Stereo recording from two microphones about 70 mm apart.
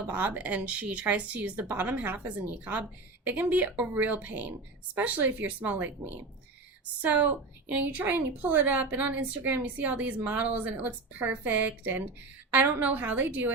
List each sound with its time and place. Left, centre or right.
0.1 s a woman's voice: right